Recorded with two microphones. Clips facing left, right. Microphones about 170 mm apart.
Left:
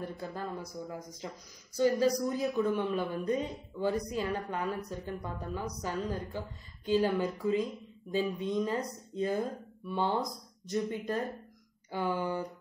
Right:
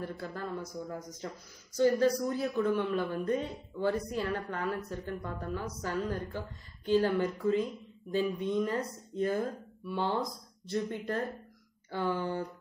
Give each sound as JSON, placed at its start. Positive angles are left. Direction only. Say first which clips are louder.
{"t": 0.0, "sound": "speech", "louder": "even", "side_deg": 15}